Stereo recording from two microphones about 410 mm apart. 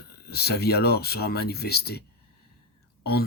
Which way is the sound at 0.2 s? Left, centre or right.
Left.